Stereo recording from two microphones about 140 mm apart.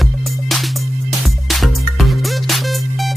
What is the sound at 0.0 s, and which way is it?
Music, centre (ahead or behind).